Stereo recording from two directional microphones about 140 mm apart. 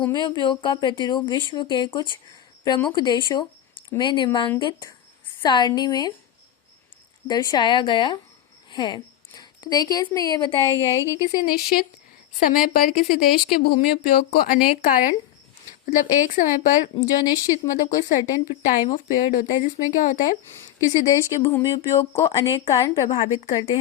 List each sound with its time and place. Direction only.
0.1 s speech: 30° left (ahead or behind)
7.3 s speech: 30° left (ahead or behind)
10.7 s speech: 20° left (ahead or behind)
11.4 s a woman's voice: 90° left; by 16.9 s 70° left (ahead or behind)
17.0 s speech: 25° left (ahead or behind)
18.9 s speech: 70° left (ahead or behind)
20.5 s speech: 20° left (ahead or behind)